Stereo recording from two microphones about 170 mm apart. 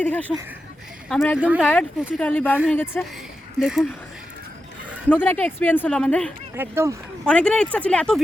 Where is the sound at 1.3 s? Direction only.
10° right (ahead or behind).